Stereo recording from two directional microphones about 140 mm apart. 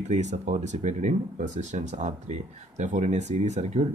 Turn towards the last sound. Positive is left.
turn(degrees=-55)  # may be behind; listen again after turning